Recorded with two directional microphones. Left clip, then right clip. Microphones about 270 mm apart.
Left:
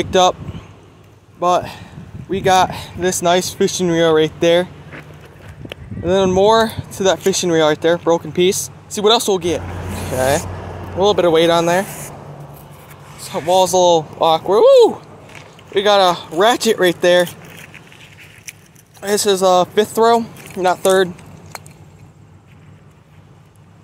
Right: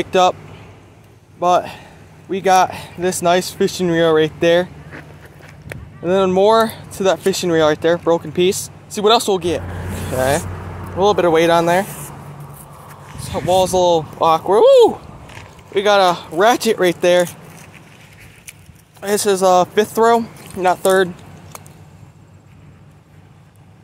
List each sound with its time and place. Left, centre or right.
0.0 s speech: centre
1.4 s speech: centre
6.0 s speech: centre
9.6 s speech: left
10.1 s speech: centre
10.4 s vehicle: left
11.0 s speech: centre
13.2 s speech: centre
18.5 s speech: centre